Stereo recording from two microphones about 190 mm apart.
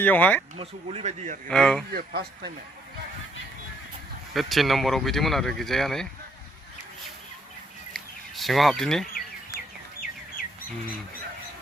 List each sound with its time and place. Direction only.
0.0 s speech: 10° left (ahead or behind)
0.5 s speech: 30° right (ahead or behind)
1.5 s speech: 5° left (ahead or behind)
1.9 s speech: 55° right (ahead or behind)
4.4 s speech: centre (ahead or behind)
7.9 s a sound: centre (ahead or behind)